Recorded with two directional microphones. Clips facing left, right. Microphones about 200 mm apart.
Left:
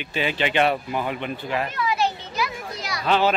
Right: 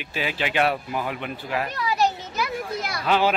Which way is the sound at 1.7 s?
40° right (ahead or behind).